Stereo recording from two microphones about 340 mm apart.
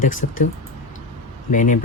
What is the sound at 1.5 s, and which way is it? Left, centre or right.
Speech, left.